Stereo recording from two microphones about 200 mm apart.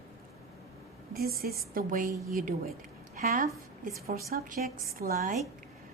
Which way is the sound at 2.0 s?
15° right (ahead or behind).